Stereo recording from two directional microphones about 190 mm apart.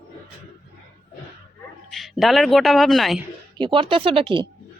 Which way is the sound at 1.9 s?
Centre (ahead or behind).